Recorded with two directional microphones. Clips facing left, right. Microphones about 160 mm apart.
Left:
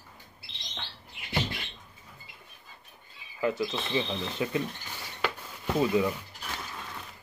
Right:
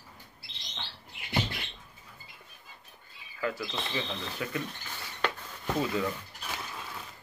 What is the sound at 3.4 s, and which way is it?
Speech, 20° left (ahead or behind).